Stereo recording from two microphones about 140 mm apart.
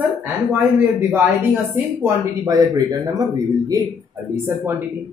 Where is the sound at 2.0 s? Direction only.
25° right (ahead or behind).